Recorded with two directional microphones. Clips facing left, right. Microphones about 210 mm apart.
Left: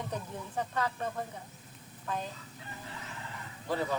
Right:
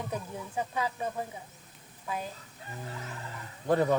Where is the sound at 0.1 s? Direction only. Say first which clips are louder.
Right 2 dB; 10° right (ahead or behind).